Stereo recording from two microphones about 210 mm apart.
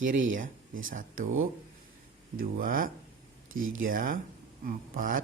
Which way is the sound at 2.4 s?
40° right (ahead or behind).